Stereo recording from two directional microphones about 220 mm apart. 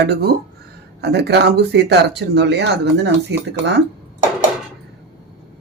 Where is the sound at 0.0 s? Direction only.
45° right (ahead or behind).